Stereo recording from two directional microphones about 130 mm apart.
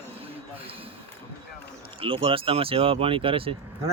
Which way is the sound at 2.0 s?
45° right (ahead or behind).